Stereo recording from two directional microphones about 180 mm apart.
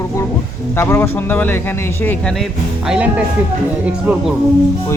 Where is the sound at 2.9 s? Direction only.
5° right (ahead or behind).